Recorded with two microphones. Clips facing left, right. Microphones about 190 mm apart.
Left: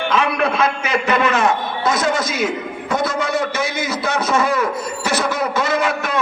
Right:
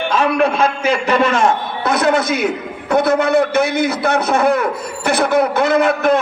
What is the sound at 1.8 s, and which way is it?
A man's voice, 60° right (ahead or behind).